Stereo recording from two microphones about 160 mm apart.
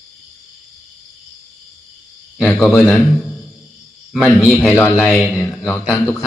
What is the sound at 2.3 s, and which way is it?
A man's voice, centre (ahead or behind).